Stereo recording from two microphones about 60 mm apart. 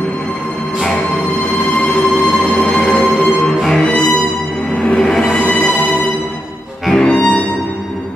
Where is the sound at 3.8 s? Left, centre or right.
Centre.